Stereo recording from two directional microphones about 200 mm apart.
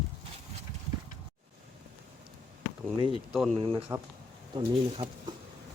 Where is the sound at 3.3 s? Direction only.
Centre (ahead or behind).